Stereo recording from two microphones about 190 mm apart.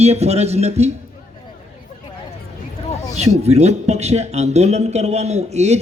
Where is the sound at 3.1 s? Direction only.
35° right (ahead or behind).